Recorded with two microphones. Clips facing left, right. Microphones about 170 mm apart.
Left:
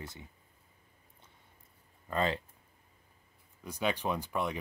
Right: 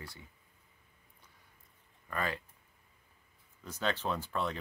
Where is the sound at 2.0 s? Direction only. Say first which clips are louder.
Left 5 dB; 25° left (ahead or behind).